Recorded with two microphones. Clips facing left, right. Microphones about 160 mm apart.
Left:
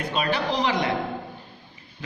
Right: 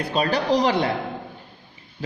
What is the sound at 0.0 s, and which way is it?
Speech, 35° right (ahead or behind).